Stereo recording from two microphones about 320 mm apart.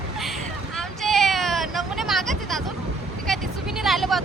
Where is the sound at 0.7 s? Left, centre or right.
Centre.